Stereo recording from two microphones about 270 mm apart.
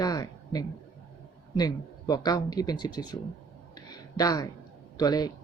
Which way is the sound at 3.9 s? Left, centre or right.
Centre.